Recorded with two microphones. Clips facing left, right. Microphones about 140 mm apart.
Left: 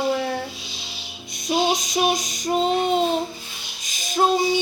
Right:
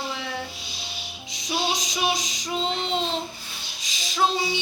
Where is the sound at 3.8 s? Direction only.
50° left (ahead or behind).